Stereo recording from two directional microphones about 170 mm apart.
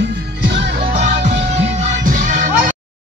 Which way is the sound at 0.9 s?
45° right (ahead or behind).